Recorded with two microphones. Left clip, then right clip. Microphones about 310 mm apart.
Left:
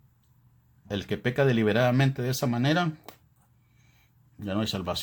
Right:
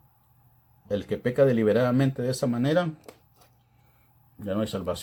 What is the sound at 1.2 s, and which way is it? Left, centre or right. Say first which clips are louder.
Speech: right 3 dB; left.